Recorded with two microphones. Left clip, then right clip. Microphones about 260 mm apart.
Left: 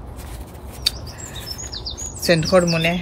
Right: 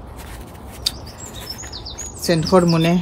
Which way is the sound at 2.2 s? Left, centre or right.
Centre.